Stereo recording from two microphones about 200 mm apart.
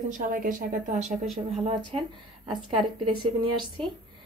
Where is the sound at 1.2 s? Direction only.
Centre (ahead or behind).